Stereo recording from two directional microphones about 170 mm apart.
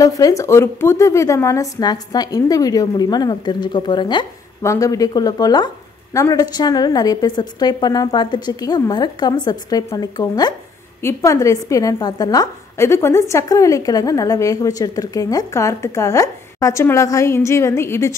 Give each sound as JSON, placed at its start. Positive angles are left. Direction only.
{"t": 0.0, "sound": "speech", "side_deg": 20}